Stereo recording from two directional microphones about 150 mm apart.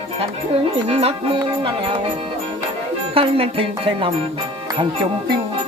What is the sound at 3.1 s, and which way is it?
Speech, 40° right (ahead or behind).